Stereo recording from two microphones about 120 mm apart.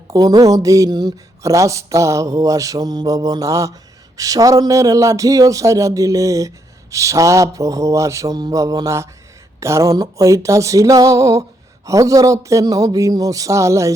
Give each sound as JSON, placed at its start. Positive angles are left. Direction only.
{"t": 0.1, "sound": "speech", "side_deg": -30}